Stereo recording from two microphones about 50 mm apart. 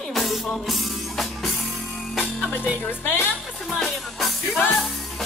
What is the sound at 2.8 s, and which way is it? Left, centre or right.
Speech, left.